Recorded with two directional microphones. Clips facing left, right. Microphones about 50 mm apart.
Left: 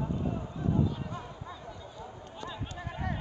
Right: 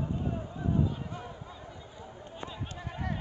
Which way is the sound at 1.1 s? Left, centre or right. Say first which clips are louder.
Left 1 dB; centre.